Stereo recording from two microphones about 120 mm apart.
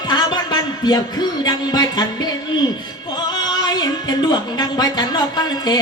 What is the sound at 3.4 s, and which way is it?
Music, 35° left (ahead or behind).